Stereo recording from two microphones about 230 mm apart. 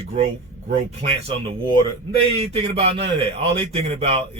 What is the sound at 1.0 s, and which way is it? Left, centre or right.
A man's voice, right.